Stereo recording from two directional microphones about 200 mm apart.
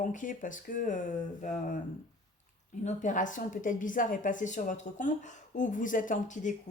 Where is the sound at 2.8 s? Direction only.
40° left (ahead or behind).